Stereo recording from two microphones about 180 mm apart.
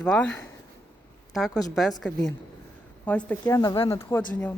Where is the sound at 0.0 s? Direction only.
5° left (ahead or behind).